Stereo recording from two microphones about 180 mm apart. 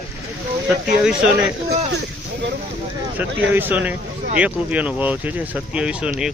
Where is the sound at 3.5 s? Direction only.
10° right (ahead or behind).